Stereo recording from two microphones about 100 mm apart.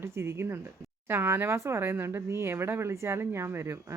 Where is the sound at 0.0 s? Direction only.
25° right (ahead or behind).